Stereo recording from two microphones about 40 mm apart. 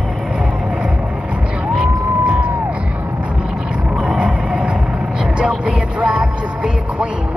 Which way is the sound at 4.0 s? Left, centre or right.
Right.